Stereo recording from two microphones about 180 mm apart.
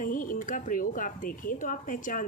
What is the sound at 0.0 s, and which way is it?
Speech, 50° left (ahead or behind).